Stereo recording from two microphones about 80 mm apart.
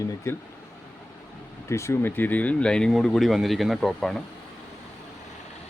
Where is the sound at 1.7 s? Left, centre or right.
Left; by 4.2 s centre.